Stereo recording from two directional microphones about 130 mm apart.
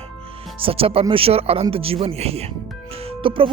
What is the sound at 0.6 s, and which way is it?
Speech, 45° right (ahead or behind).